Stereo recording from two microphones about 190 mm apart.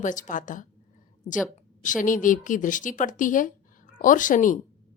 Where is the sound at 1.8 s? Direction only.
45° left (ahead or behind).